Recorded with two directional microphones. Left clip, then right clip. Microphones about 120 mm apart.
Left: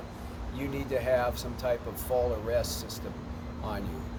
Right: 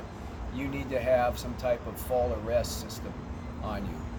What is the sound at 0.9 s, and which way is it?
Speech, 35° left (ahead or behind).